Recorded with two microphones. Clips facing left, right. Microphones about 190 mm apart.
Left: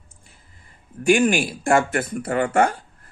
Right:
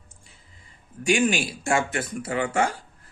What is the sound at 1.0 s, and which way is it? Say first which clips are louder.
Speech: left 5 dB; 55° left (ahead or behind).